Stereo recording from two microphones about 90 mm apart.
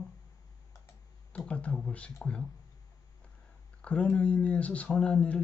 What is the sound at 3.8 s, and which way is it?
Speech, 15° left (ahead or behind).